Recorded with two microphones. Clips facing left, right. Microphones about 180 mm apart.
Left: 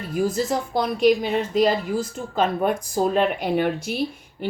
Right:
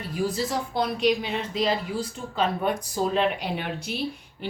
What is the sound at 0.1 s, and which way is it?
Speech, 45° left (ahead or behind).